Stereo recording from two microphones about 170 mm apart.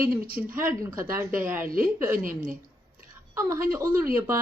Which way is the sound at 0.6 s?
20° right (ahead or behind).